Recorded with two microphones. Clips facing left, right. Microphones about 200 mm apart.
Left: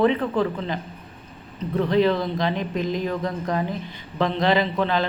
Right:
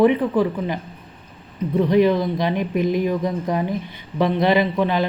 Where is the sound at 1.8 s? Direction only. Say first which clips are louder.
Right 3 dB; 15° right (ahead or behind).